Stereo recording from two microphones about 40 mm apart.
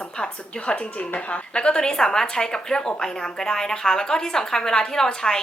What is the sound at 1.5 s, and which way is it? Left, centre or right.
A woman's voice, left.